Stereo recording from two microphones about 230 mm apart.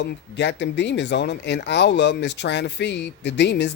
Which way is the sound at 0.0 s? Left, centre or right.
Left.